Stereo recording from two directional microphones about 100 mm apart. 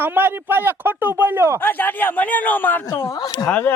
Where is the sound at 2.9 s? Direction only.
35° left (ahead or behind).